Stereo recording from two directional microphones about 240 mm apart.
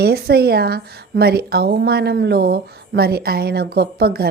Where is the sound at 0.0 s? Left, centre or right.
Right.